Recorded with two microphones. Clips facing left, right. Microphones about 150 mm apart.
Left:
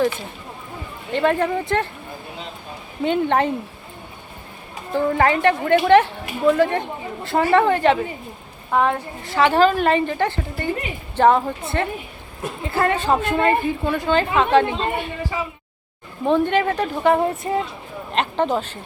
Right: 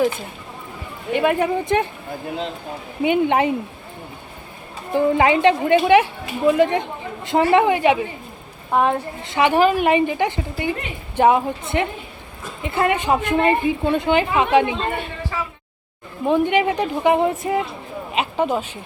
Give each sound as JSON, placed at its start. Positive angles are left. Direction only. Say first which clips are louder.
{"t": 1.1, "sound": "a woman's voice", "louder": "right 1 dB", "side_deg": -10}
{"t": 3.0, "sound": "a woman's voice", "louder": "right 2 dB", "side_deg": -15}
{"t": 4.9, "sound": "a woman's voice", "louder": "right 2 dB", "side_deg": -15}
{"t": 16.2, "sound": "a woman's voice", "louder": "right 1 dB", "side_deg": -15}
{"t": 18.1, "sound": "a woman's voice", "louder": "even", "side_deg": -10}